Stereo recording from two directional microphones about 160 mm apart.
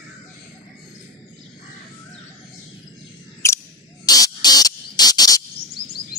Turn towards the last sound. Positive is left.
turn(degrees=25)  # may be behind; listen again after turning